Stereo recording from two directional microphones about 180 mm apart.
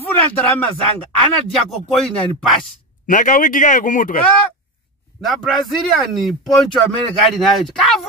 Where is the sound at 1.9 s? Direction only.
5° left (ahead or behind).